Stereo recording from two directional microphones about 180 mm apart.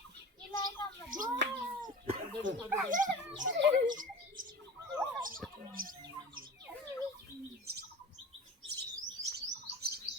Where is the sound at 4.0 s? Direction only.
50° right (ahead or behind).